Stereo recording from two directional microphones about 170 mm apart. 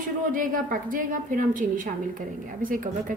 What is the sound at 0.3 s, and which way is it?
A woman's voice, 55° right (ahead or behind).